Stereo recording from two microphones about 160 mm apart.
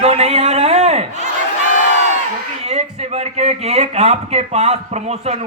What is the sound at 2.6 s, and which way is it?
Speech, 40° right (ahead or behind).